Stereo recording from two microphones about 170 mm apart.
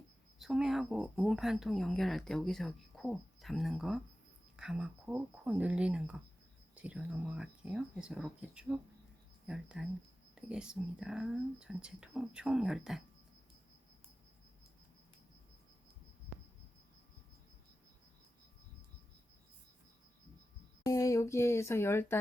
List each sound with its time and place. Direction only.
0.3 s speech: centre (ahead or behind)
20.8 s speech: 20° left (ahead or behind)